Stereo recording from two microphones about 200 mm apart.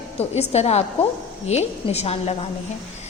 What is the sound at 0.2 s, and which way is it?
A woman's voice, 30° left (ahead or behind).